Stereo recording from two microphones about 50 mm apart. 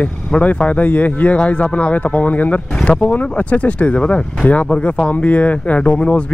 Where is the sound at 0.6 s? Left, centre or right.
Left.